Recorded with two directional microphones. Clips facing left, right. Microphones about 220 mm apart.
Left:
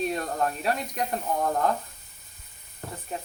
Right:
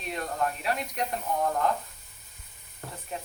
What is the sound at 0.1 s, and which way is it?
Speech, 40° left (ahead or behind).